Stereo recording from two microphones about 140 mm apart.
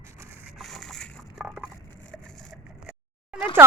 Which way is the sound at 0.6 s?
Centre (ahead or behind).